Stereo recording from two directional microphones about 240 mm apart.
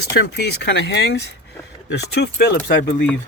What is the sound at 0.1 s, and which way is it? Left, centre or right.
Speech, left.